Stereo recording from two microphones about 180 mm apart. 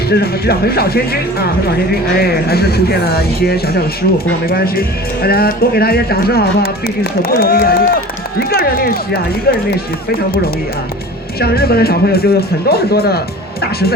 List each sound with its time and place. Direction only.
0.1 s speech: 60° left (ahead or behind)